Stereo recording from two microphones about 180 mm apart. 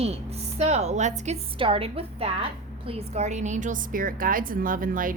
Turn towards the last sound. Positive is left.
turn(degrees=-50)  # may be behind; listen again after turning